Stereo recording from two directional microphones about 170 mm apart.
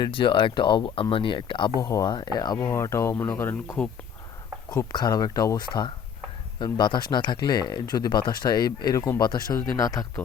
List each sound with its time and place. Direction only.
0.0 s speech: 30° left (ahead or behind); by 3.8 s 15° left (ahead or behind)
4.7 s speech: 25° left (ahead or behind)